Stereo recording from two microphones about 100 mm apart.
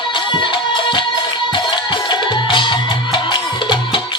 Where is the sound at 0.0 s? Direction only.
55° left (ahead or behind).